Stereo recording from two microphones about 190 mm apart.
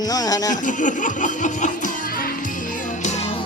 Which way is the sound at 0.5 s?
40° left (ahead or behind).